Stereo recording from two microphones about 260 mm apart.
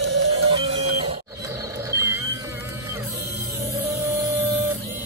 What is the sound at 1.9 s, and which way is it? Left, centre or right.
Music, centre.